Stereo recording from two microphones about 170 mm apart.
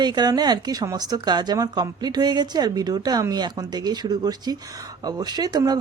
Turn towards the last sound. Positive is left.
turn(degrees=-20)  # may be behind; listen again after turning